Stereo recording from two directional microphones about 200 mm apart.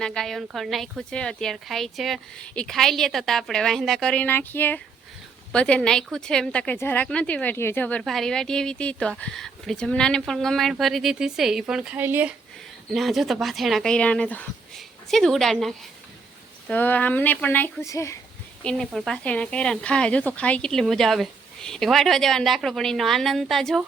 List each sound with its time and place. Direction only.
0.0 s speech: 5° left (ahead or behind)
18.6 s speech: 5° left (ahead or behind)